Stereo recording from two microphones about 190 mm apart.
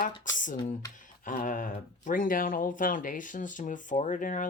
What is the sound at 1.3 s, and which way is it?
Speech, 45° left (ahead or behind).